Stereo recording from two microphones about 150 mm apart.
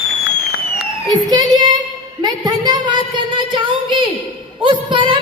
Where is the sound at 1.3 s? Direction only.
25° right (ahead or behind).